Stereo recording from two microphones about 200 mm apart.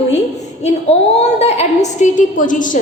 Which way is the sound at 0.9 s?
30° left (ahead or behind).